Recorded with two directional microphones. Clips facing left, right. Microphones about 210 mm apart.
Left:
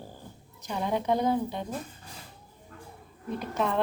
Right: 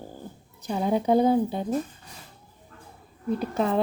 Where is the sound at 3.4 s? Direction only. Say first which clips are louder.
Right 3 dB; 35° right (ahead or behind).